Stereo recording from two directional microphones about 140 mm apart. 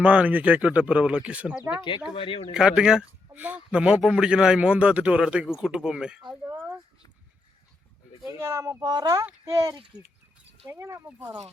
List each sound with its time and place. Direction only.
0.0 s speech: 10° right (ahead or behind)
2.0 s speech: 40° left (ahead or behind)
2.5 s speech: 5° right (ahead or behind)
8.3 s speech: 20° right (ahead or behind)
8.8 s speech: 30° right (ahead or behind)